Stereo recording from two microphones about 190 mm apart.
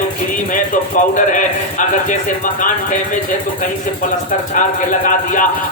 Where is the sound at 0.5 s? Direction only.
45° left (ahead or behind).